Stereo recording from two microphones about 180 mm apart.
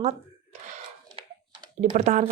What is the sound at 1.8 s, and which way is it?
Speech, 40° right (ahead or behind).